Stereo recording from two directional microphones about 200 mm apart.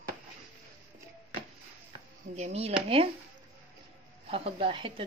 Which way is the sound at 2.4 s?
30° right (ahead or behind).